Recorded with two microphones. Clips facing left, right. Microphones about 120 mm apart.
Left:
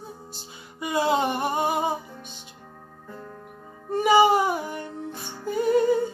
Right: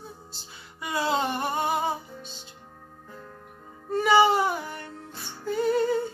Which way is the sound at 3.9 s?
15° left (ahead or behind).